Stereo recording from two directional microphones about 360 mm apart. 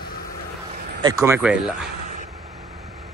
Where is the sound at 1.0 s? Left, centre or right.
Centre.